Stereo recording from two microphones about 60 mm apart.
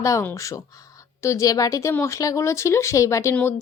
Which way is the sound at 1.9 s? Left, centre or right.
Left.